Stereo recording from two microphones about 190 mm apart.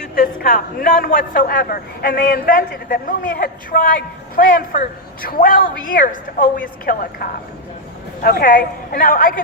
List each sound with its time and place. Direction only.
0.2 s a man's voice: 45° left (ahead or behind)